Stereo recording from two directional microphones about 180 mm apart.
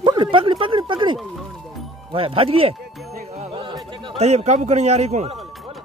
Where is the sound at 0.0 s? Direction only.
25° right (ahead or behind).